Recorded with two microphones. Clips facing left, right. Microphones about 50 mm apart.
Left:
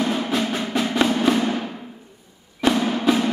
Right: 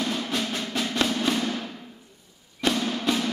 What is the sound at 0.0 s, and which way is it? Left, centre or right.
Music, centre.